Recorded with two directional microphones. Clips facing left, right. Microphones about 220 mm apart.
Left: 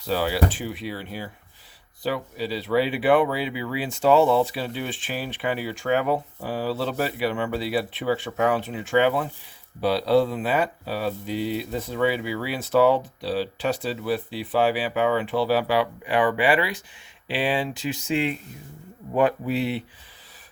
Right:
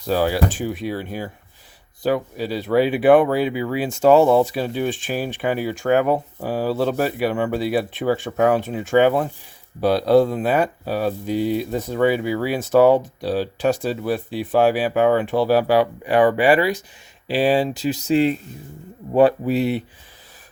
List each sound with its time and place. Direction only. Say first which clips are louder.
0.0 s speech: right 4 dB; 45° right (ahead or behind)